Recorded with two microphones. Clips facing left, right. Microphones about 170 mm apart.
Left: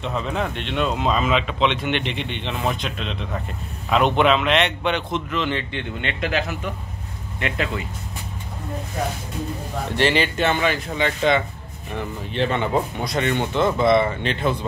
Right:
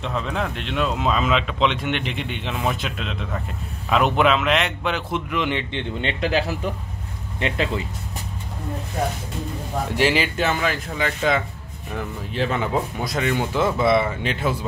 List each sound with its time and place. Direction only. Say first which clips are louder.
0.4 s a man's voice: even; centre (ahead or behind)
5.3 s speech: right 1 dB; 15° right (ahead or behind)
9.9 s a man's voice: left 1 dB; 5° right (ahead or behind)